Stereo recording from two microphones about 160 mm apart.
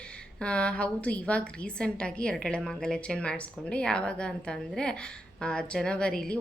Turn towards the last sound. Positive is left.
turn(degrees=5)  # may be behind; listen again after turning